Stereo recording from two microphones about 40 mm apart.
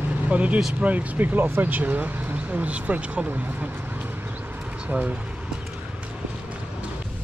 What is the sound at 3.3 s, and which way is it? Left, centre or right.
Speech, right.